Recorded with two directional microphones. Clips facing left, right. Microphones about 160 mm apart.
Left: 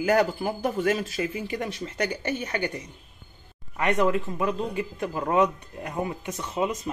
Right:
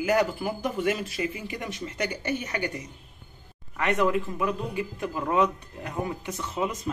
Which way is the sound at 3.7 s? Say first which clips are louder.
Left 1 dB; 15° left (ahead or behind).